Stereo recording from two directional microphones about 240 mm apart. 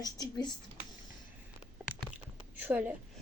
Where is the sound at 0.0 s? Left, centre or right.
Centre.